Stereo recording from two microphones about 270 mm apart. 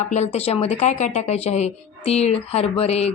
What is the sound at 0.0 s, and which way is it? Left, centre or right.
Speech, left.